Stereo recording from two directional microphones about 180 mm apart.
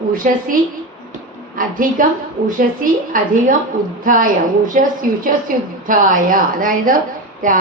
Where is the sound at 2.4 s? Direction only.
50° right (ahead or behind).